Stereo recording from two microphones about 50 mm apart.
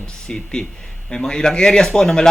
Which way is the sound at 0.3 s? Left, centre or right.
Centre.